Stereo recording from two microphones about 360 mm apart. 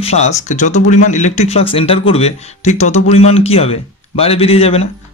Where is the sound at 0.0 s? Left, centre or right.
Centre.